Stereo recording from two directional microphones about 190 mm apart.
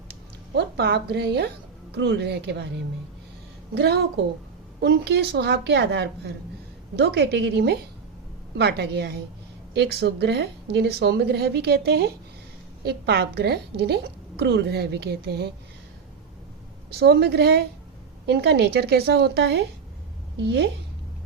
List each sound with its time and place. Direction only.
0.5 s a woman's voice: 60° right (ahead or behind)
3.8 s a woman's voice: 60° right (ahead or behind)
16.9 s a woman's voice: 60° right (ahead or behind)